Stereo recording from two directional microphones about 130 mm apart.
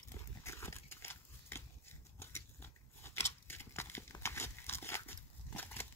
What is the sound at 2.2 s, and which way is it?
Biting, 20° left (ahead or behind).